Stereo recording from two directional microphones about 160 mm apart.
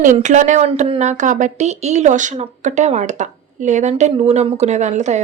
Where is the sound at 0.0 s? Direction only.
50° right (ahead or behind).